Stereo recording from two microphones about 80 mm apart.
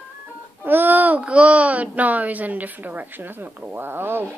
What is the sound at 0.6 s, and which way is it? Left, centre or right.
A child's voice, right.